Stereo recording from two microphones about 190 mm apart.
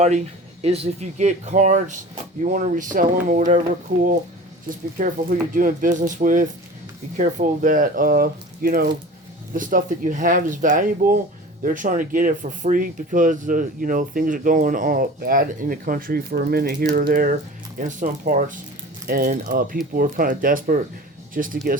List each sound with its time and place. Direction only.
0.6 s speech: 30° right (ahead or behind)
5.0 s speech: 45° right (ahead or behind)